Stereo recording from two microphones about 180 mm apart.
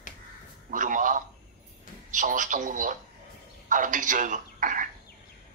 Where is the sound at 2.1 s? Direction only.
45° right (ahead or behind).